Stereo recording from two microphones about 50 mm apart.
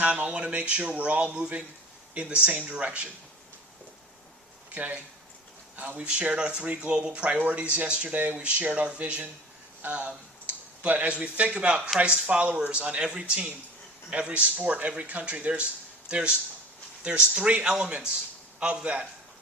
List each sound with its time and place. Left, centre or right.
0.0 s speech: right
4.7 s speech: right
6.0 s speech: right
6.6 s speech: right
6.9 s speech: centre